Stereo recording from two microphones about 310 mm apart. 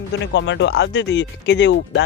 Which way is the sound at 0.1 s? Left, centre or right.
Left.